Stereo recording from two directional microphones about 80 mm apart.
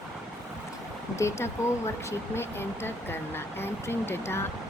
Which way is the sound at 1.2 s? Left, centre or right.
Left.